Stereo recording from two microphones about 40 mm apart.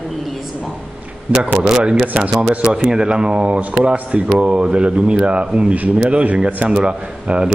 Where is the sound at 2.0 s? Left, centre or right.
Right.